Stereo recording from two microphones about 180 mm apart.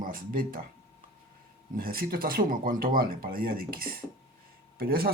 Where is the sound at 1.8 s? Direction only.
55° right (ahead or behind).